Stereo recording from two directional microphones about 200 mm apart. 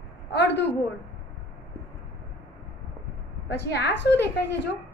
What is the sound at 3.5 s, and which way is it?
Speech, 55° left (ahead or behind).